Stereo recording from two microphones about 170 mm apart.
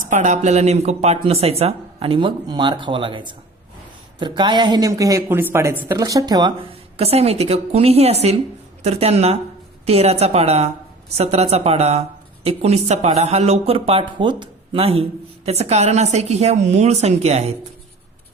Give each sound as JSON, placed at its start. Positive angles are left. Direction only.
{"t": 0.1, "sound": "speech", "side_deg": -45}